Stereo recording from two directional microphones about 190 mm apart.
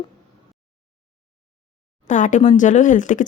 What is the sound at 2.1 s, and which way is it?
Speech, 40° left (ahead or behind).